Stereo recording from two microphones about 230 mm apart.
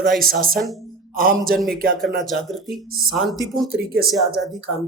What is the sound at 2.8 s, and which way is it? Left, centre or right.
Speech, right.